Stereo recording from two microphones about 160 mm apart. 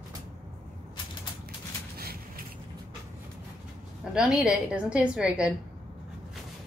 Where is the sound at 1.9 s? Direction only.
70° right (ahead or behind).